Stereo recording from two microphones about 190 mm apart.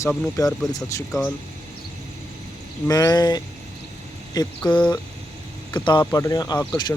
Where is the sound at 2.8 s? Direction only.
20° left (ahead or behind).